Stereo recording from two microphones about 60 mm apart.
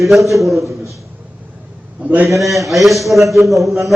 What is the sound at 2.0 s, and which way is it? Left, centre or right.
Speech, right.